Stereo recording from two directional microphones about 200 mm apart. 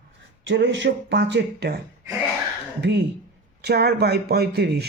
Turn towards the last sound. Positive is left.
turn(degrees=-55)  # may be behind; listen again after turning